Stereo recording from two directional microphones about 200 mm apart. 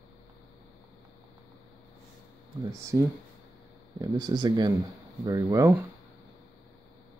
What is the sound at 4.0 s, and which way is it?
Speech, 20° right (ahead or behind).